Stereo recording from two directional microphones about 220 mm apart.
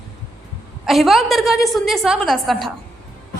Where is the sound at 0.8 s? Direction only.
Centre (ahead or behind).